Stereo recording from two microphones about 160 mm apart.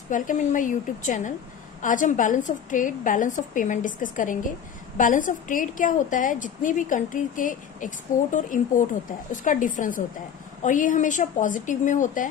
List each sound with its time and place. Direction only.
0.1 s a woman's voice: 55° left (ahead or behind)